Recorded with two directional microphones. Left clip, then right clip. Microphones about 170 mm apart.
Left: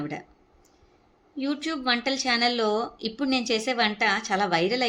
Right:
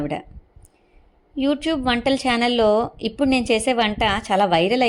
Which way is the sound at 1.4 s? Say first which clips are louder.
Right 8 dB; 40° right (ahead or behind).